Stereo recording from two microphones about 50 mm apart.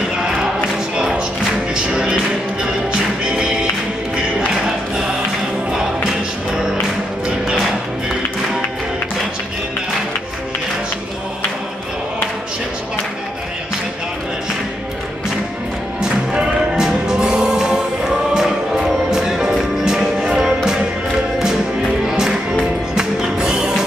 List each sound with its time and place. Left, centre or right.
0.9 s music: centre
5.7 s music: centre
16.3 s music: centre
22.0 s music: centre